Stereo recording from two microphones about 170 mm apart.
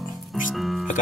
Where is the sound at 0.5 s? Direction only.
Centre (ahead or behind).